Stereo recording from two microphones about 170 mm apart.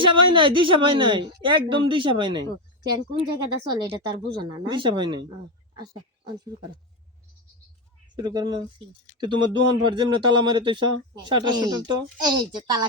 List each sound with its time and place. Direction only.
0.0 s speech: 30° right (ahead or behind)
8.1 s speech: 25° right (ahead or behind)